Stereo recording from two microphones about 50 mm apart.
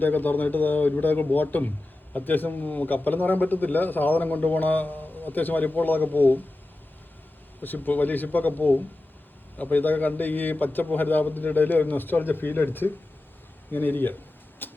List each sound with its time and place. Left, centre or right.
0.0 s a man's voice: left
7.6 s a man's voice: left
14.6 s vehicle: left